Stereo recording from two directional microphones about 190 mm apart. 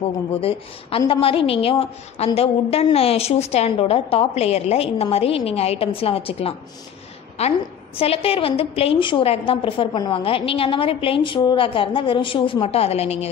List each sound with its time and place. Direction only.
0.4 s a woman's voice: 30° left (ahead or behind)